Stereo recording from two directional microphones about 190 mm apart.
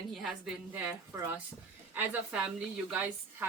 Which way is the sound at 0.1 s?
Centre (ahead or behind).